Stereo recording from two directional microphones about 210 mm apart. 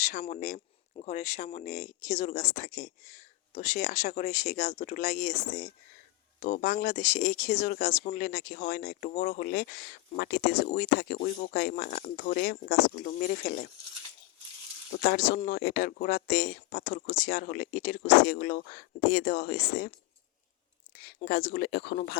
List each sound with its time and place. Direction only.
0.0 s speech: 35° left (ahead or behind)
15.0 s speech: 45° left (ahead or behind)
20.9 s speech: 50° left (ahead or behind)